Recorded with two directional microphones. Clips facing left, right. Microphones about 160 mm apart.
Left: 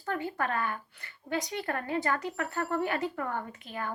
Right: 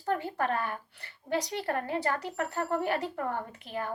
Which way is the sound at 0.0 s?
35° right (ahead or behind).